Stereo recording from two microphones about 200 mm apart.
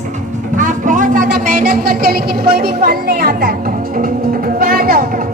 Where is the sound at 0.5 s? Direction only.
40° right (ahead or behind).